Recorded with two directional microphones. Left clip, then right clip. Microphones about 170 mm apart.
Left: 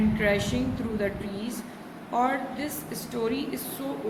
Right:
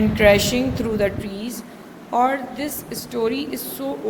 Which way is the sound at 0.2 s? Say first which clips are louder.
Right 14 dB; 45° right (ahead or behind).